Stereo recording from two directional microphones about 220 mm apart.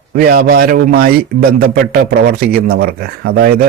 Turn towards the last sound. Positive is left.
turn(degrees=-45)  # may be behind; listen again after turning